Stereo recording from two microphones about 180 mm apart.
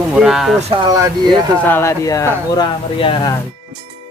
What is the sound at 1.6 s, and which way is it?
Speech, 10° left (ahead or behind).